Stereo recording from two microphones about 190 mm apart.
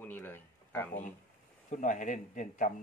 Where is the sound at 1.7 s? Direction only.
40° left (ahead or behind).